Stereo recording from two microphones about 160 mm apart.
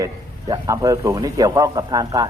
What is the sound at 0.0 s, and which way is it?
A man's voice, 20° right (ahead or behind).